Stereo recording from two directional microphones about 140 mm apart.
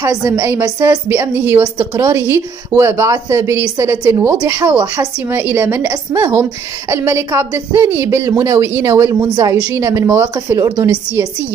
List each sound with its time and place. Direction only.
0.0 s a woman's voice: 15° right (ahead or behind)